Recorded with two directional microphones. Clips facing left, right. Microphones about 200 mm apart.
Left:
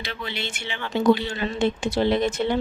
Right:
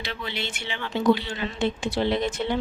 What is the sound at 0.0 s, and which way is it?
Speech, 50° left (ahead or behind).